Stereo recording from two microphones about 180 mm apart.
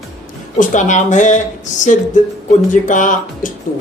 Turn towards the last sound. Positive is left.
turn(degrees=45)  # may be behind; listen again after turning